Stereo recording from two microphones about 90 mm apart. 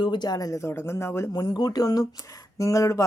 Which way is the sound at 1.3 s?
50° left (ahead or behind).